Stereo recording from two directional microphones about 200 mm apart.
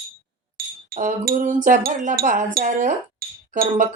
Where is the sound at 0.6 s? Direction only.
50° right (ahead or behind).